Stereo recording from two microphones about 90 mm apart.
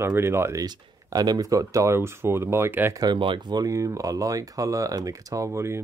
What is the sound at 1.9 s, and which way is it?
Speech, 25° right (ahead or behind).